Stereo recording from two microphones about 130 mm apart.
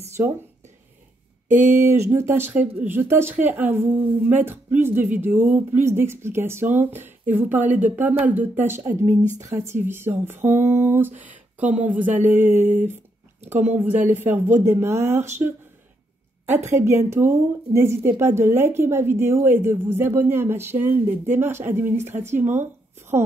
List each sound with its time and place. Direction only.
1.5 s a woman's voice: 15° right (ahead or behind)
16.4 s a woman's voice: 20° right (ahead or behind)